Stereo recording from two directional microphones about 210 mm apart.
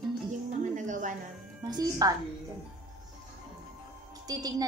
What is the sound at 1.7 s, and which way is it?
Speech, 15° right (ahead or behind).